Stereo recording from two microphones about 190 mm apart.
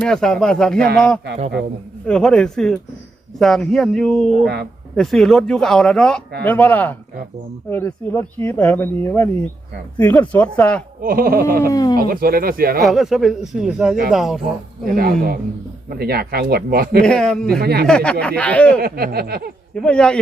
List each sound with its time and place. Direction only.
0.0 s speech: 5° left (ahead or behind)
4.4 s a woman's voice: 60° right (ahead or behind)
4.9 s speech: centre (ahead or behind)
11.0 s speech: 50° right (ahead or behind)
11.7 s speech: 20° left (ahead or behind)
11.9 s speech: 50° right (ahead or behind)
12.8 s speech: centre (ahead or behind)
14.9 s speech: 50° right (ahead or behind)
17.0 s speech: 5° left (ahead or behind)
17.6 s a woman's voice: 55° right (ahead or behind)
17.8 s speech: 5° left (ahead or behind)
18.8 s speech: 55° right (ahead or behind)
19.7 s speech: 5° left (ahead or behind)